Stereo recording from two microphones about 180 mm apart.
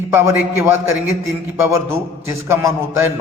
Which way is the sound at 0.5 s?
15° right (ahead or behind).